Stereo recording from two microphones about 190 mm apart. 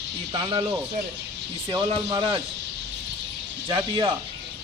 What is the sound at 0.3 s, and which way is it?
Speech, 25° right (ahead or behind).